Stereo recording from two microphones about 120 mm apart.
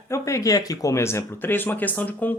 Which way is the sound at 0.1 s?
25° left (ahead or behind).